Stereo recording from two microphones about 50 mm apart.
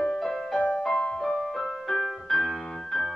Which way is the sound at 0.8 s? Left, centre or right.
Centre.